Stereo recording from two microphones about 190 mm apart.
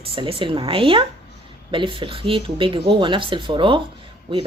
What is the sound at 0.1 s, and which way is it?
Speech, 30° right (ahead or behind).